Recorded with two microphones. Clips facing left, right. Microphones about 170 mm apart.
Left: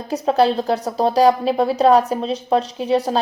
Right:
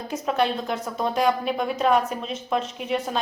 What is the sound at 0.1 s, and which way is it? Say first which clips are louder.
A woman's voice: left 8 dB; 35° left (ahead or behind).